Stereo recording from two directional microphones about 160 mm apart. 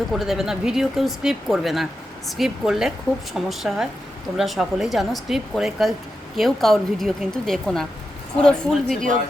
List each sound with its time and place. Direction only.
0.1 s speech: centre (ahead or behind)